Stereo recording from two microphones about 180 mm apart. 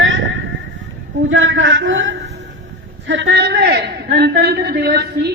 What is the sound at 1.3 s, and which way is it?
A man's voice, 90° right.